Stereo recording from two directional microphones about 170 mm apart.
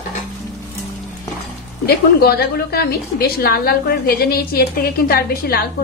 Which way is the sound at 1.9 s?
65° left (ahead or behind).